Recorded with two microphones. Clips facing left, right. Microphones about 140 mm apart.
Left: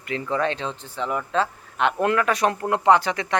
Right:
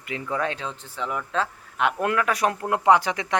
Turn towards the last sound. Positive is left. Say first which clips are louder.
# left 1 dB
turn(degrees=-15)  # may be behind; listen again after turning